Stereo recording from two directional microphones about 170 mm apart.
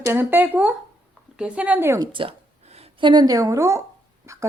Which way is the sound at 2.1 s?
30° right (ahead or behind).